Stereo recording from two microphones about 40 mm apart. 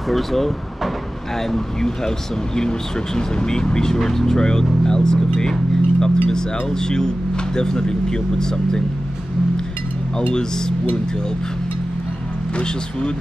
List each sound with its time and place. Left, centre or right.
0.1 s speech: centre
1.5 s speech: centre